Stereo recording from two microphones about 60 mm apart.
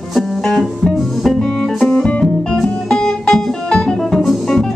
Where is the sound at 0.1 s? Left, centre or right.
Centre.